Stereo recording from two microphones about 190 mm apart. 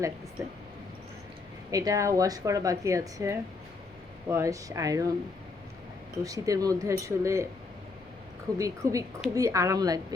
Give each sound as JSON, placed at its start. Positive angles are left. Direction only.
{"t": 1.7, "sound": "speech", "side_deg": -15}
{"t": 6.2, "sound": "speech", "side_deg": -20}
{"t": 8.5, "sound": "a woman's voice", "side_deg": -15}